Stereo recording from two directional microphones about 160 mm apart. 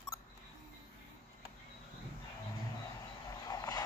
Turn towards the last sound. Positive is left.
turn(degrees=25)  # may be behind; listen again after turning